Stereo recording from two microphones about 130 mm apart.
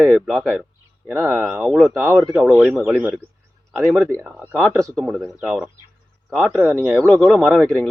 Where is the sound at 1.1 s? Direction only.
20° right (ahead or behind).